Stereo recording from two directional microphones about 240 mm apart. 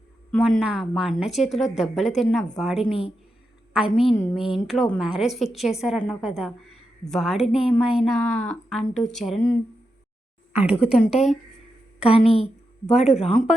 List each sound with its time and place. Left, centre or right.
0.3 s a woman's voice: centre
12.1 s speech: left